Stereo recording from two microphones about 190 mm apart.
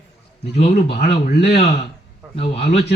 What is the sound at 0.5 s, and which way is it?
Speech, 35° left (ahead or behind).